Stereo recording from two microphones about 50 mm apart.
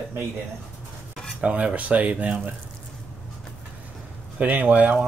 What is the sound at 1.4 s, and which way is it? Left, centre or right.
Speech, right.